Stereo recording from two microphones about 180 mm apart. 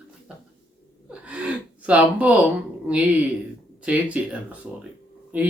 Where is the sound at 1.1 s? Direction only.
5° right (ahead or behind).